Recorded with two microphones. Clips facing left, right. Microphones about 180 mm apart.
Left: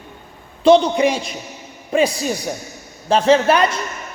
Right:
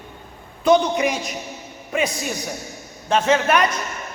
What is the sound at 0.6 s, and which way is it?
A woman's voice, 30° left (ahead or behind).